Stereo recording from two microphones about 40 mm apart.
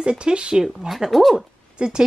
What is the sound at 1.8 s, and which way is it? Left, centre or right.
Speech, centre.